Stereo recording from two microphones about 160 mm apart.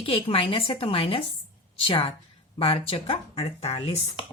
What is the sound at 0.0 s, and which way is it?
A woman's voice, 35° left (ahead or behind).